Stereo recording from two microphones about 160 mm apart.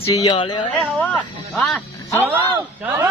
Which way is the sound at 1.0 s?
5° left (ahead or behind).